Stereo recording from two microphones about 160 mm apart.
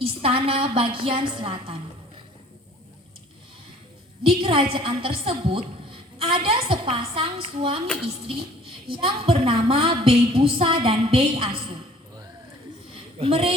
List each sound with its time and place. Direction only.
0.0 s a woman's voice: 35° right (ahead or behind)
4.3 s a woman's voice: 35° right (ahead or behind)
8.9 s a woman's voice: 35° right (ahead or behind)
13.1 s a woman's voice: 35° right (ahead or behind)